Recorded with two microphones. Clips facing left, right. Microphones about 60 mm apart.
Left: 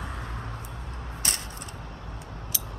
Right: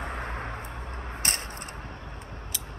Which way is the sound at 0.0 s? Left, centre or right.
Right.